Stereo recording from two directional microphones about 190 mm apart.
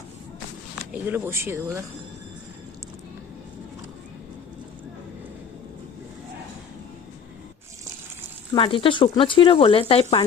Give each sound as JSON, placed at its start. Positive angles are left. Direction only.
{"t": 0.8, "sound": "speech", "side_deg": -10}
{"t": 8.5, "sound": "speech", "side_deg": 30}